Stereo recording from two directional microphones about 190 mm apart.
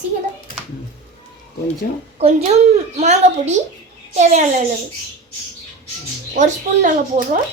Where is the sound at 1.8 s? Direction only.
50° left (ahead or behind).